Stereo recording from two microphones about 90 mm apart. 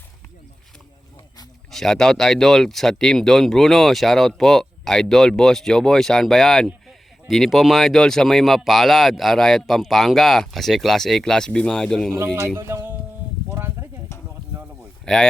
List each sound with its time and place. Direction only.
1.7 s speech: 5° left (ahead or behind)
12.2 s speech: 30° right (ahead or behind)
13.5 s a sound: 25° right (ahead or behind)
15.0 s speech: 10° left (ahead or behind)